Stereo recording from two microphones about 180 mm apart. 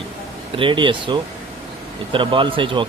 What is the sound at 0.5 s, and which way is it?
Speech, 30° right (ahead or behind).